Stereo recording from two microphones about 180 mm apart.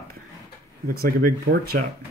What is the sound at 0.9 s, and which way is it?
Speech, 55° right (ahead or behind).